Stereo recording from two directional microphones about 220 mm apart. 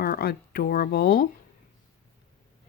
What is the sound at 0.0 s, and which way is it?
Speech, 45° left (ahead or behind).